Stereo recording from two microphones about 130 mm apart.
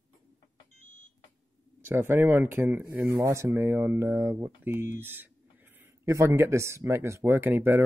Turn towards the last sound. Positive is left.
turn(degrees=-15)  # may be behind; listen again after turning